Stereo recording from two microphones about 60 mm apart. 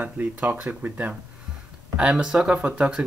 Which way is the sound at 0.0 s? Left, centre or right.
Right.